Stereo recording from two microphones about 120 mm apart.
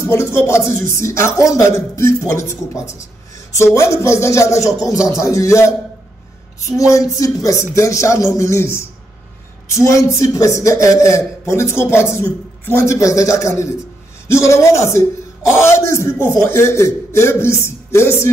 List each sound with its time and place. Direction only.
0.1 s speech: 20° left (ahead or behind)